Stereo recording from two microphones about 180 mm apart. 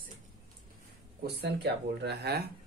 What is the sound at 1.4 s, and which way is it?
Speech, 70° right (ahead or behind).